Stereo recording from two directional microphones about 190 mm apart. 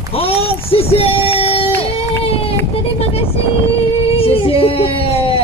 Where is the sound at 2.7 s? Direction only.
30° left (ahead or behind).